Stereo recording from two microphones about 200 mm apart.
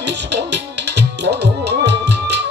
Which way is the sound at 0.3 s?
55° right (ahead or behind).